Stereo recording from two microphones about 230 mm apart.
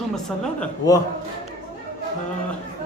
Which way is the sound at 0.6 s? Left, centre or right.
Centre.